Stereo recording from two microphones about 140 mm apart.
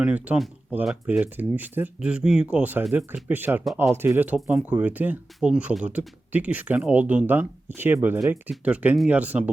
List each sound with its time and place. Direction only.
0.0 s speech: 10° right (ahead or behind)